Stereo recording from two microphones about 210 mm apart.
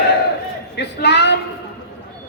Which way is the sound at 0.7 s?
55° left (ahead or behind).